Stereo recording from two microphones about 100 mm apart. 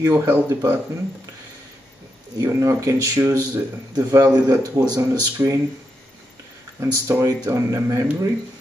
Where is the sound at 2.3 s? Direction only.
35° right (ahead or behind).